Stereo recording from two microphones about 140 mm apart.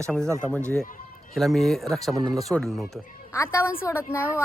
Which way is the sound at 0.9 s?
75° left (ahead or behind).